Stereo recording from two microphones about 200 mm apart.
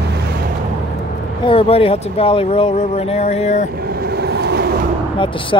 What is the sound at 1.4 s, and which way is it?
Speech, 30° left (ahead or behind).